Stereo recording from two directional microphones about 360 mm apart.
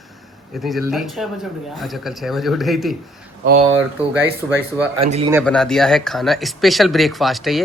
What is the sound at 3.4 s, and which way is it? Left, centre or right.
Speech, right.